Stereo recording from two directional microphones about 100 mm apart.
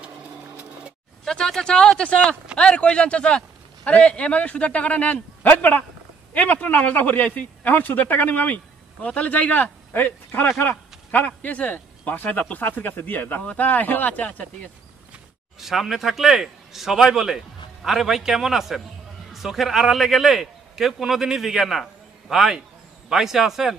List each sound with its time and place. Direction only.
0.0 s printer: 15° right (ahead or behind)
1.2 s speech: 5° left (ahead or behind)
15.6 s a man's voice: centre (ahead or behind)